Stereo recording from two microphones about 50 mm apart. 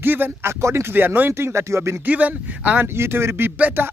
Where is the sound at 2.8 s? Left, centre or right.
Right.